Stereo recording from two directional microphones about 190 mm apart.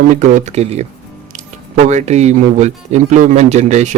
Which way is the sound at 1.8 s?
35° right (ahead or behind).